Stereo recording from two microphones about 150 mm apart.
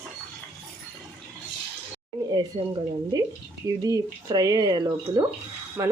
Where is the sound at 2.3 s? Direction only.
25° right (ahead or behind).